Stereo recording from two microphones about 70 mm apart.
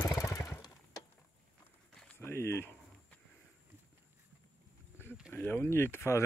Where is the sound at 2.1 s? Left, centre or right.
Left.